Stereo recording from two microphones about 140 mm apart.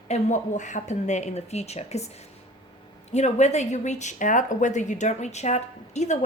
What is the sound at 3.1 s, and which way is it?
A woman's voice, 55° left (ahead or behind).